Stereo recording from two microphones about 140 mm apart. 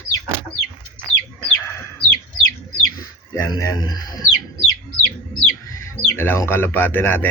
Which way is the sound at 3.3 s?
25° left (ahead or behind).